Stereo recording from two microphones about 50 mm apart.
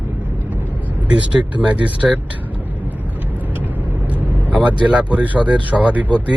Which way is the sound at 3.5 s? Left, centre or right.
Right.